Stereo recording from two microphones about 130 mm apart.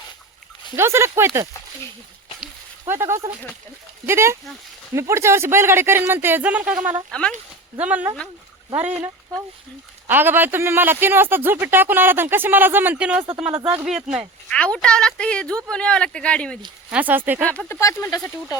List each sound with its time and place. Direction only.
0.8 s speech: 20° right (ahead or behind)
2.8 s speech: 20° right (ahead or behind)
7.1 s a woman's voice: 5° left (ahead or behind)
7.8 s a man's voice: 10° right (ahead or behind)
10.1 s a man's voice: 15° right (ahead or behind)
14.5 s a woman's voice: 10° left (ahead or behind)
16.9 s a man's voice: 10° right (ahead or behind)
17.7 s speech: 20° left (ahead or behind)